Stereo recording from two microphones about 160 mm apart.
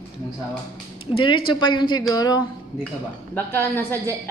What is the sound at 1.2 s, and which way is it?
Speech, 35° left (ahead or behind).